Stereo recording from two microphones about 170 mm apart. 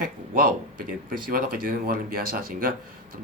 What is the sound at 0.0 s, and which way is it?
Speech, 55° right (ahead or behind).